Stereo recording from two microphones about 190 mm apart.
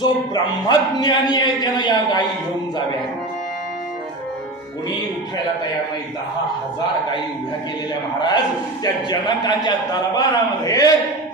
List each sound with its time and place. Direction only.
0.0 s a man's voice: 20° left (ahead or behind)
8.8 s a man's voice: 20° left (ahead or behind)